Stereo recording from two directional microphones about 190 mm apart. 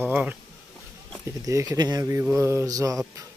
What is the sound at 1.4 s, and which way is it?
Speech, 15° right (ahead or behind).